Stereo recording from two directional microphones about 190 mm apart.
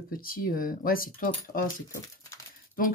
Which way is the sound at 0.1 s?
50° left (ahead or behind).